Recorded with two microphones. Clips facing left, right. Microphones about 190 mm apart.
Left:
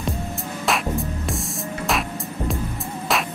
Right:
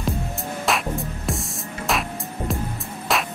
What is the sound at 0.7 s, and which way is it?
Music, centre (ahead or behind).